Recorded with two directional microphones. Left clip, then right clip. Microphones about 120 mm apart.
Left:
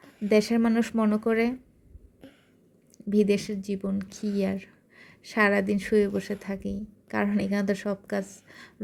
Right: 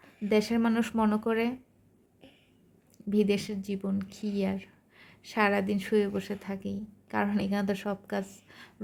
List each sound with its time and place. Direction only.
0.0 s a sound: 45° left (ahead or behind)
0.3 s speech: 20° left (ahead or behind)
3.1 s speech: 20° left (ahead or behind)